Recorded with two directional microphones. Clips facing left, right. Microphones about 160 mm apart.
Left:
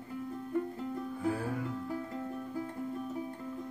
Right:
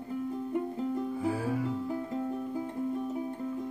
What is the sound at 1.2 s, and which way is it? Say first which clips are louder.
Music: right 1 dB; 5° right (ahead or behind).